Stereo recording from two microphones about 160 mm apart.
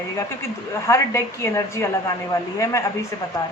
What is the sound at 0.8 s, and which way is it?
A woman's voice, 20° left (ahead or behind).